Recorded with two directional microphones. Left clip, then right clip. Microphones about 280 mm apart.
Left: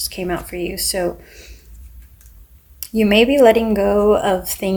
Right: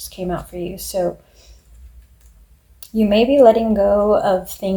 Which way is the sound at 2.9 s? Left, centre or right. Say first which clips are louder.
Even; left.